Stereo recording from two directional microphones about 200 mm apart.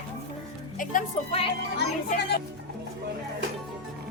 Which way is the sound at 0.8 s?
40° left (ahead or behind).